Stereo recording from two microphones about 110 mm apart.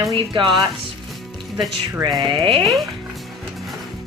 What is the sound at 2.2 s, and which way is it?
Speech, 45° right (ahead or behind).